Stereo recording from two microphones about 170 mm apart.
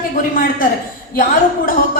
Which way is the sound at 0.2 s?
55° left (ahead or behind).